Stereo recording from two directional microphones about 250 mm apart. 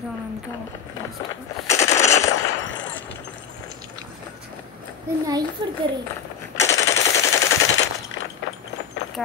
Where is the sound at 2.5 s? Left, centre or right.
Left.